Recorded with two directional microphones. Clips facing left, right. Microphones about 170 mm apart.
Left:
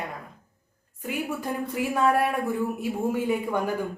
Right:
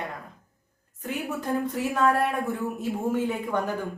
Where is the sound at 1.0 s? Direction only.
10° left (ahead or behind).